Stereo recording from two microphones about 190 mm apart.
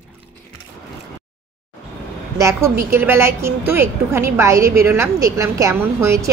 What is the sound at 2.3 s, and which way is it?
A woman's voice, 15° right (ahead or behind).